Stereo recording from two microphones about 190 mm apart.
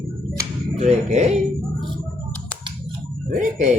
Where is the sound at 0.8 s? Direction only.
35° right (ahead or behind).